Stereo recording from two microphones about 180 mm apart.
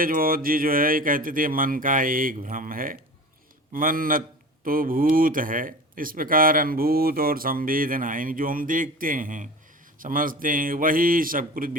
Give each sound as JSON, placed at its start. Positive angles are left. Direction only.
{"t": 0.0, "sound": "speech", "side_deg": -55}